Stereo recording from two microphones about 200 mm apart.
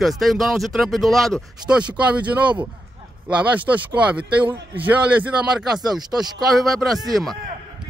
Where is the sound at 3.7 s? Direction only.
10° right (ahead or behind).